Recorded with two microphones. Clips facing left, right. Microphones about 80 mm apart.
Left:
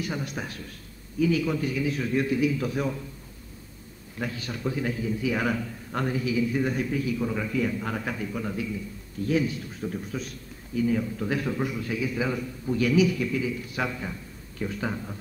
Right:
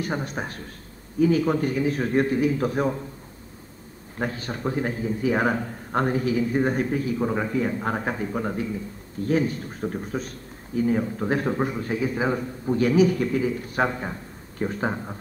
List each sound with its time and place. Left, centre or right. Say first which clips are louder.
0.0 s a man's voice: right 3 dB; right
4.2 s a man's voice: right 3 dB; right